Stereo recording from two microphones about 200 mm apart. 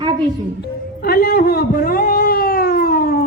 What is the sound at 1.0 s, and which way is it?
Cat, 50° left (ahead or behind).